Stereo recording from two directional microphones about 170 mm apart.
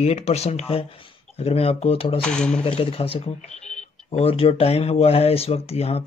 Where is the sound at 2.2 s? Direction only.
5° left (ahead or behind).